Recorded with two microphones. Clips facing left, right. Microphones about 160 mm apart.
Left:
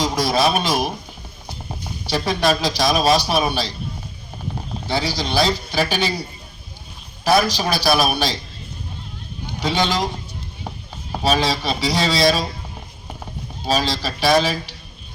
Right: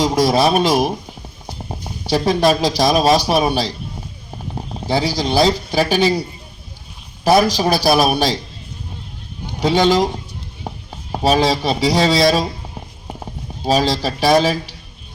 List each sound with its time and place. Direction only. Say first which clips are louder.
0.0 s speech: right 4 dB; 40° right (ahead or behind)
2.0 s a man's voice: right 5 dB; 40° right (ahead or behind)
4.9 s a man's voice: right 5 dB; 40° right (ahead or behind)
7.3 s a man's voice: right 5 dB; 40° right (ahead or behind)
9.6 s a man's voice: right 7 dB; 40° right (ahead or behind)
11.1 s a man's voice: right 4 dB; 40° right (ahead or behind)
13.7 s a man's voice: right 5 dB; 45° right (ahead or behind)